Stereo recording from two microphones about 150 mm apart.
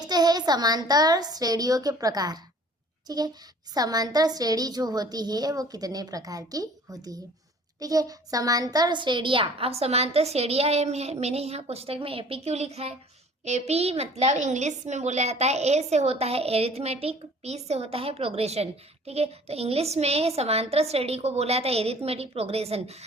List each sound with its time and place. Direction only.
0.0 s a woman's voice: 30° right (ahead or behind); by 23.0 s 45° right (ahead or behind)